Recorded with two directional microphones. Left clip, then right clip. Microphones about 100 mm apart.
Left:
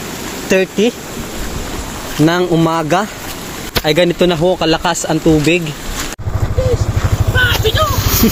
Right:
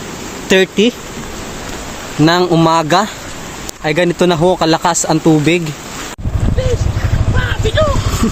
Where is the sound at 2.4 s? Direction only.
65° right (ahead or behind).